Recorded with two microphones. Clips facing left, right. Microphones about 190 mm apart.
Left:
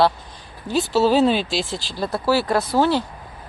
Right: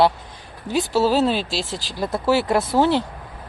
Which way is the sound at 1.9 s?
15° right (ahead or behind).